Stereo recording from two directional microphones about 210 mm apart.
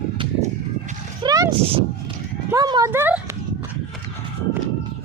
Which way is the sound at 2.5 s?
20° right (ahead or behind).